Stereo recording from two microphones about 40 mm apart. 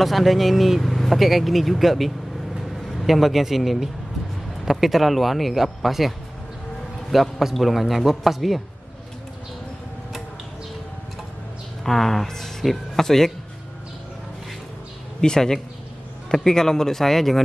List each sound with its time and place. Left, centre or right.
0.0 s a man's voice: centre
11.8 s speech: centre
15.1 s speech: centre